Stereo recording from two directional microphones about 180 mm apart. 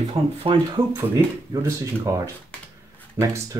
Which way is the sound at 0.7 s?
20° right (ahead or behind).